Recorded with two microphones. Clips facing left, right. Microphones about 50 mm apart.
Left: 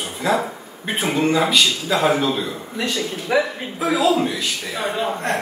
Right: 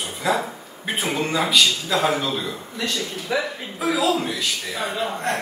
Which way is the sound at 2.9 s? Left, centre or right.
Left.